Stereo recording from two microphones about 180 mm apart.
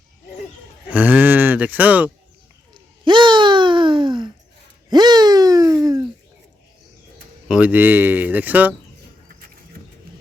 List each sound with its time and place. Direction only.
0.9 s speech: 10° right (ahead or behind)
2.7 s a sound: 25° right (ahead or behind)
7.4 s speech: 5° right (ahead or behind)